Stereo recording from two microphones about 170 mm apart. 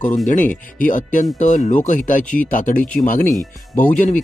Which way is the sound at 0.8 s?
50° left (ahead or behind).